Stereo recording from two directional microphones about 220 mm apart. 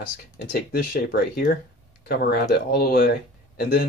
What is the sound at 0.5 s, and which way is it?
Speech, 45° left (ahead or behind).